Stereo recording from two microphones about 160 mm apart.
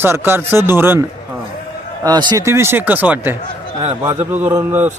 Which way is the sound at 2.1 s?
25° right (ahead or behind).